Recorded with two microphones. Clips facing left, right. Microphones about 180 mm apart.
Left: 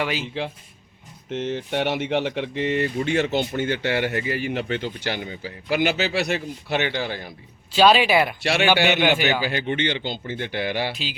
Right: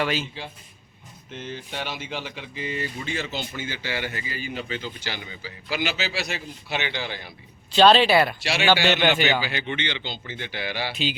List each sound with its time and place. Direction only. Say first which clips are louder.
0.0 s speech: even; 15° left (ahead or behind)
1.3 s speech: left 9 dB; 75° left (ahead or behind); by 7.3 s 45° left (ahead or behind)
7.7 s speech: even; 10° left (ahead or behind)
8.4 s speech: left 5 dB; 55° left (ahead or behind)
9.0 s speech: left 2 dB; 10° left (ahead or behind)
9.4 s speech: left 5 dB; 45° left (ahead or behind)
10.9 s speech: right 5 dB; centre (ahead or behind)